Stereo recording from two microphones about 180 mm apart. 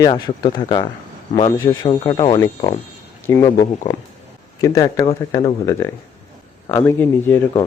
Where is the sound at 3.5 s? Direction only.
25° left (ahead or behind).